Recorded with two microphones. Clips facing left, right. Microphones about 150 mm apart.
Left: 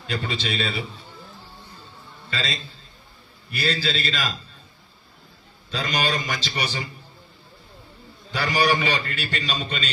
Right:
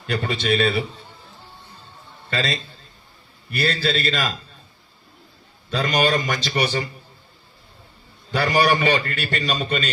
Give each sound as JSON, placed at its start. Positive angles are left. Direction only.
{"t": 0.1, "sound": "a man's voice", "side_deg": -55}
{"t": 2.3, "sound": "a man's voice", "side_deg": -50}
{"t": 5.7, "sound": "a man's voice", "side_deg": -50}
{"t": 8.3, "sound": "a man's voice", "side_deg": -55}